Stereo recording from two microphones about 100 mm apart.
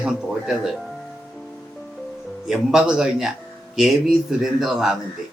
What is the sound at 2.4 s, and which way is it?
Speech, 5° right (ahead or behind).